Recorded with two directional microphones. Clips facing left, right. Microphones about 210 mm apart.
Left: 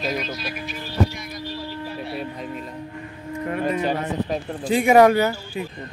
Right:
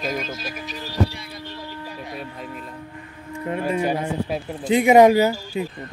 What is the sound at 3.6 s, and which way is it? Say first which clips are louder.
Speech: right 1 dB; 10° right (ahead or behind).